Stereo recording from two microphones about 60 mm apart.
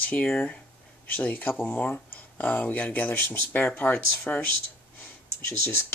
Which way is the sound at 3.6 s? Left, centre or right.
Left.